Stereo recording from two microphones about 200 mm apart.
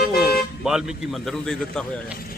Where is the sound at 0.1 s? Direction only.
50° left (ahead or behind).